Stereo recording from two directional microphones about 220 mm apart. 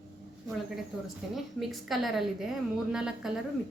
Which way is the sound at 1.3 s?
Centre (ahead or behind).